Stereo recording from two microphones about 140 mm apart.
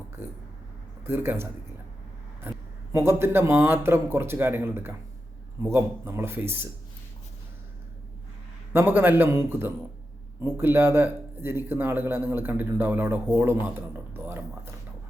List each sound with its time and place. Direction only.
1.0 s speech: 15° right (ahead or behind)
2.9 s speech: 20° right (ahead or behind)
8.7 s speech: 15° right (ahead or behind)